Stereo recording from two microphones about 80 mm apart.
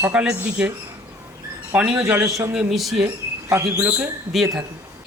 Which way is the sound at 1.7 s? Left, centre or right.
Centre.